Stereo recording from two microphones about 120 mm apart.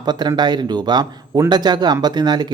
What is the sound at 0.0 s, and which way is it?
Speech, 35° right (ahead or behind).